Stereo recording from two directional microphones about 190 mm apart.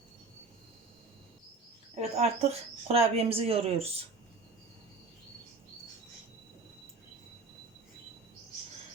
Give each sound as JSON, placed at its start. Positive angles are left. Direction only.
{"t": 2.0, "sound": "speech", "side_deg": -35}